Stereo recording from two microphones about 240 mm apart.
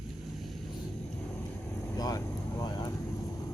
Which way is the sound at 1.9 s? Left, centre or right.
Centre.